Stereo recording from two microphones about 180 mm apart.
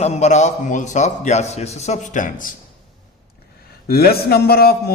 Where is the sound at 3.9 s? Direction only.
60° left (ahead or behind).